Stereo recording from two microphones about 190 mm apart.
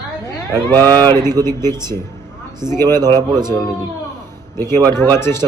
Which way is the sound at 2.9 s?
20° right (ahead or behind).